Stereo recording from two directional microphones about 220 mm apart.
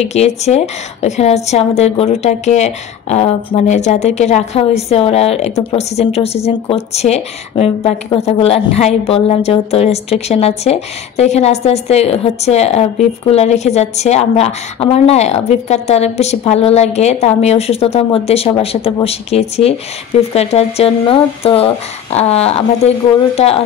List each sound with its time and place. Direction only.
0.0 s a woman's voice: 30° left (ahead or behind)